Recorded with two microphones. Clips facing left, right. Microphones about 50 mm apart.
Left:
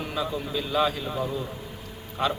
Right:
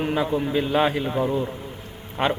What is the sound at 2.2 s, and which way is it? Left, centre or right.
Speech, right.